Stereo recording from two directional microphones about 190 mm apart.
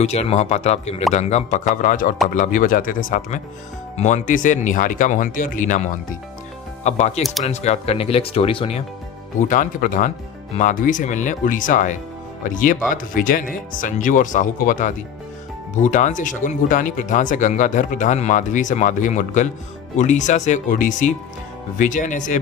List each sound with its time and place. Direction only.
0.0 s speech: 35° left (ahead or behind)
9.5 s speech: 45° left (ahead or behind)